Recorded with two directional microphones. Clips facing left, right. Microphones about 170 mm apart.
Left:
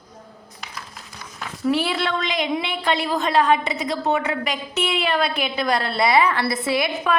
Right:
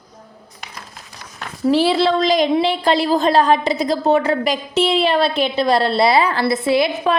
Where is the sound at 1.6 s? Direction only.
30° right (ahead or behind).